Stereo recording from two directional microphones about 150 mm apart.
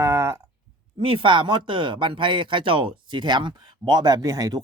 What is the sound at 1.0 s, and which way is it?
Speech, 35° right (ahead or behind).